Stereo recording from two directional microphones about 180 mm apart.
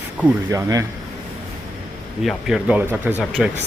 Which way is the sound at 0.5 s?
20° right (ahead or behind).